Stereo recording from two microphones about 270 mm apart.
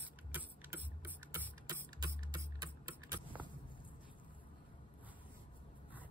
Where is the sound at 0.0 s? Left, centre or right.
Centre.